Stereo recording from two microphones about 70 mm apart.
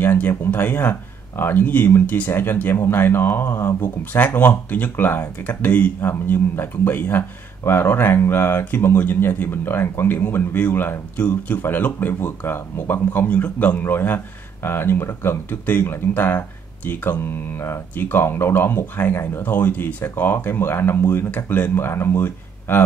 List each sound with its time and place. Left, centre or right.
0.0 s speech: left
11.1 s speech: centre